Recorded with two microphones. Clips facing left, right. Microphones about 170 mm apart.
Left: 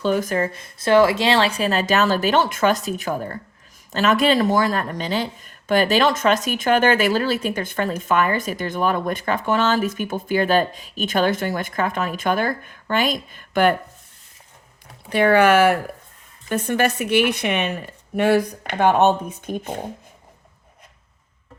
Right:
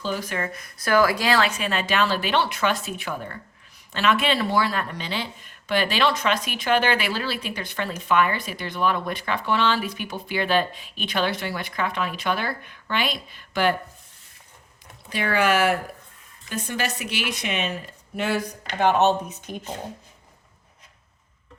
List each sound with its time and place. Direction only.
0.0 s speech: 50° left (ahead or behind)
15.1 s speech: 60° left (ahead or behind)